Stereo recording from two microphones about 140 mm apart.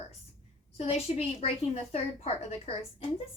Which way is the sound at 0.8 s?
45° left (ahead or behind).